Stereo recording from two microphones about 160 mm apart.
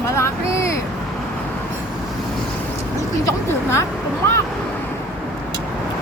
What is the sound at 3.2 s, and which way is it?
Speech, 15° left (ahead or behind).